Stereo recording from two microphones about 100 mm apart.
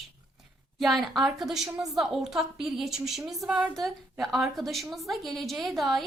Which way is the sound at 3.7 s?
Centre (ahead or behind).